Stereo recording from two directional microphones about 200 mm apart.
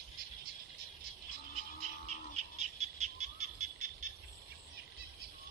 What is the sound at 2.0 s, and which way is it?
Bird, 35° right (ahead or behind).